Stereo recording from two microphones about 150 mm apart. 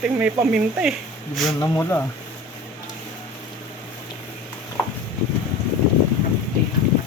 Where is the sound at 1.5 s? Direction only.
15° left (ahead or behind).